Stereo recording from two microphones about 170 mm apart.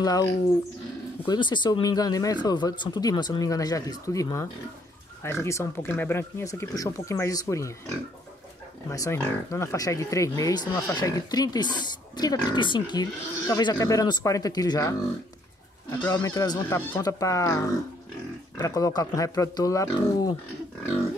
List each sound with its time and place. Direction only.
0.0 s speech: 20° left (ahead or behind)
8.9 s speech: 15° left (ahead or behind)
16.1 s speech: 20° left (ahead or behind)